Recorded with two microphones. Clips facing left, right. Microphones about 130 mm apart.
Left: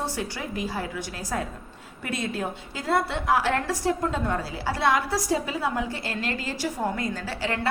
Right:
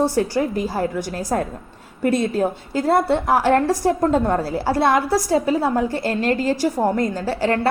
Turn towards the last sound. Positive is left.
turn(degrees=-45)  # may be behind; listen again after turning